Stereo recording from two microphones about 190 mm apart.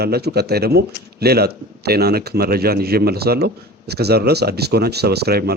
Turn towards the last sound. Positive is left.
turn(degrees=-55)  # may be behind; listen again after turning